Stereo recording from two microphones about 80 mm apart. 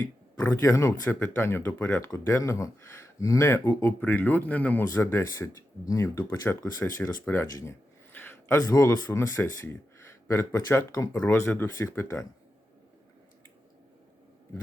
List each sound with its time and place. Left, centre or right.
0.3 s speech: left
4.0 s speech: left
4.9 s speech: left
8.1 s a sound: left
8.6 s speech: left
11.8 s speech: left